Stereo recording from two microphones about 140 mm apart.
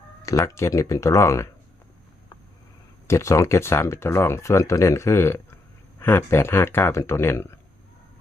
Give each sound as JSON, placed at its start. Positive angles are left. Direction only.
{"t": 0.2, "sound": "speech", "side_deg": 20}
{"t": 3.1, "sound": "speech", "side_deg": 20}